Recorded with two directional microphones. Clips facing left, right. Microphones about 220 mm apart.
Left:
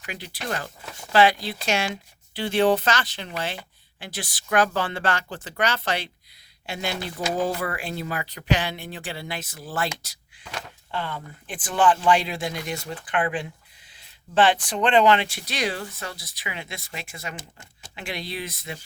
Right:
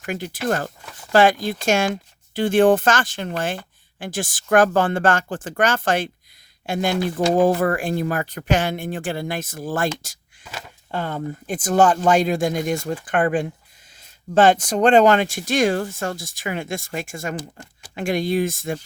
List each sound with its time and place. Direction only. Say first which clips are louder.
0.0 s speech: right 9 dB; 45° right (ahead or behind)
10.9 s speech: right 6 dB; 45° right (ahead or behind)